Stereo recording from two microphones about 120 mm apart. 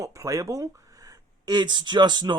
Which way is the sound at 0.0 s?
25° right (ahead or behind).